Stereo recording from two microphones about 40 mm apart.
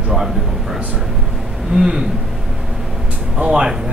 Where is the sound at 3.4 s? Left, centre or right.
Centre.